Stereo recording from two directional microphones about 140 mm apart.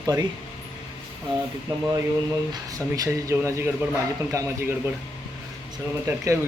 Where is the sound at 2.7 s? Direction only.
25° right (ahead or behind).